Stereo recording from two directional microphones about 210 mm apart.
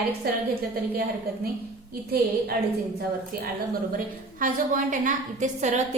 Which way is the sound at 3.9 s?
40° right (ahead or behind).